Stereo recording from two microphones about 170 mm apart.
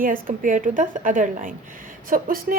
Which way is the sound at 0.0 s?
55° right (ahead or behind).